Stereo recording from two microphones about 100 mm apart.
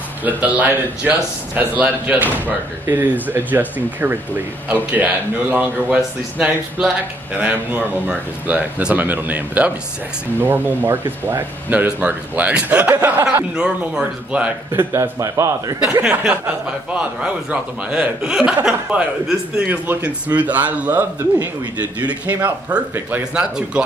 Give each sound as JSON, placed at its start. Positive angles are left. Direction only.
{"t": 0.2, "sound": "speech", "side_deg": -15}
{"t": 14.7, "sound": "a man's voice", "side_deg": -25}
{"t": 15.9, "sound": "speech", "side_deg": -15}